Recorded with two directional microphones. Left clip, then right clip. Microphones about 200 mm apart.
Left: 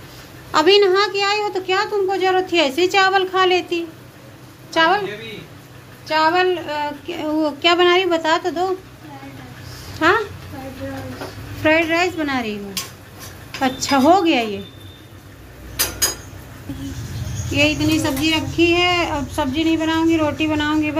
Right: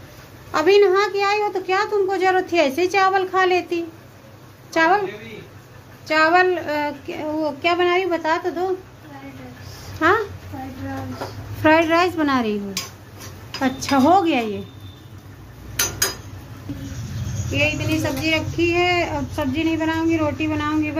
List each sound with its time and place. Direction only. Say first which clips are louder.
0.5 s a woman's voice: left 2 dB; 5° right (ahead or behind)
2.0 s a woman's voice: left 1 dB; 25° right (ahead or behind)
6.0 s female singing: even; 25° right (ahead or behind)
7.1 s speech: left 3 dB; 5° right (ahead or behind)
9.9 s speech: left 1 dB; 5° right (ahead or behind)
11.6 s a woman's voice: right 1 dB; 20° right (ahead or behind)
13.6 s speech: left 2 dB; 5° right (ahead or behind)
17.6 s a woman's voice: left 4 dB; 55° left (ahead or behind)
18.3 s speech: left 3 dB; 5° left (ahead or behind)